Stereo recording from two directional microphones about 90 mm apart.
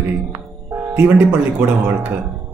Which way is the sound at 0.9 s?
20° right (ahead or behind).